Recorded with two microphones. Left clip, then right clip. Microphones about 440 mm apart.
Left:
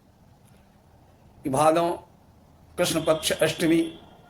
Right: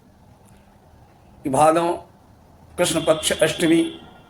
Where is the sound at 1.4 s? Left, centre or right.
Left.